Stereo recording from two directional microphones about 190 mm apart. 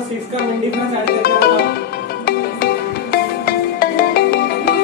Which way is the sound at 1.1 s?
50° left (ahead or behind).